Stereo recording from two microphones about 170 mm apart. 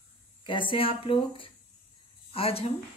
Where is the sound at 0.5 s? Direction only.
30° left (ahead or behind).